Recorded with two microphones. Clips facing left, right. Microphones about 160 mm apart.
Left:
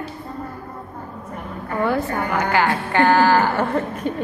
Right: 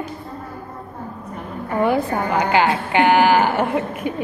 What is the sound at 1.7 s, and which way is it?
A woman's voice, 20° right (ahead or behind).